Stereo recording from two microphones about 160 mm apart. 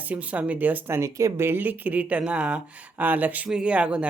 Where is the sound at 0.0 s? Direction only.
10° right (ahead or behind).